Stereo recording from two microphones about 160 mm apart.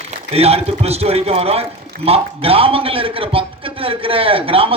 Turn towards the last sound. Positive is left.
turn(degrees=-35)  # may be behind; listen again after turning